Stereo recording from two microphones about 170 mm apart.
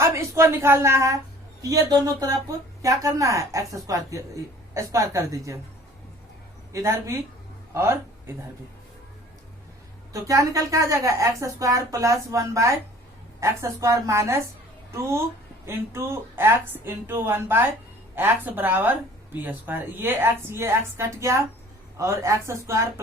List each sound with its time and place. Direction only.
0.0 s a woman's voice: 15° right (ahead or behind)
6.7 s a man's voice: 15° right (ahead or behind)
10.1 s a woman's voice: 20° right (ahead or behind)
15.6 s speech: 15° right (ahead or behind)